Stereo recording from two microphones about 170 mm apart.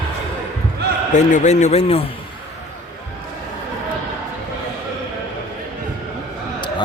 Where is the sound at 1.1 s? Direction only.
45° left (ahead or behind).